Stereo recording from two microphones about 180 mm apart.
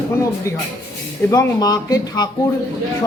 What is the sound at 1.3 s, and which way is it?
Speech, 20° left (ahead or behind).